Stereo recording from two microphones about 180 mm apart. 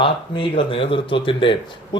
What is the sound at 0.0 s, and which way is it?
Speech, 30° left (ahead or behind).